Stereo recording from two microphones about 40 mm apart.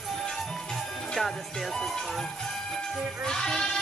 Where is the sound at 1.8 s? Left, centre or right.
Centre.